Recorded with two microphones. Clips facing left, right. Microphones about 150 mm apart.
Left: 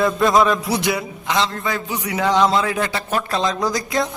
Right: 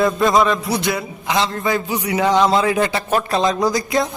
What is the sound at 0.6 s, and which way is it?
Speech, 10° left (ahead or behind).